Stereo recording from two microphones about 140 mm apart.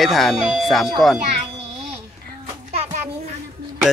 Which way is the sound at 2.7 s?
55° right (ahead or behind).